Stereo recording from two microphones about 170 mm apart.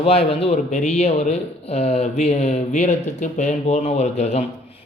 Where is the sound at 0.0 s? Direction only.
35° left (ahead or behind).